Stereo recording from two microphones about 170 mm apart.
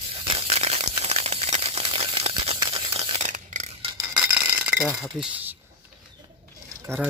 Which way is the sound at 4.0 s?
10° right (ahead or behind).